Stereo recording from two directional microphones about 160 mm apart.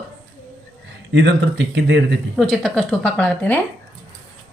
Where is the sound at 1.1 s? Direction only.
90° right.